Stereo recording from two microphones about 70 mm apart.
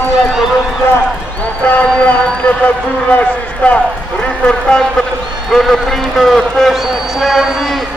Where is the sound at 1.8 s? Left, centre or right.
Centre.